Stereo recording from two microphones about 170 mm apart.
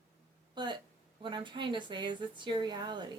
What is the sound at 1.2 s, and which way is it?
Speech, 25° right (ahead or behind).